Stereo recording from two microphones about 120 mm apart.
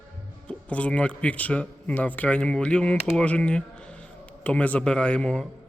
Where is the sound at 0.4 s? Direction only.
10° left (ahead or behind).